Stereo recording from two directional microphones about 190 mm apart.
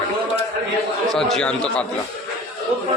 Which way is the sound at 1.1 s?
Centre (ahead or behind).